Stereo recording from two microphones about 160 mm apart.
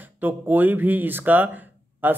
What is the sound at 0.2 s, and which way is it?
Speech, 10° right (ahead or behind).